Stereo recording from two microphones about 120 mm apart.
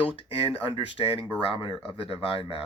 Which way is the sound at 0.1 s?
50° left (ahead or behind).